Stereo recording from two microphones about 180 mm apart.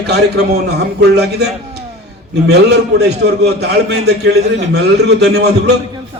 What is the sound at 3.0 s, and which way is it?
A man's voice, 70° right (ahead or behind).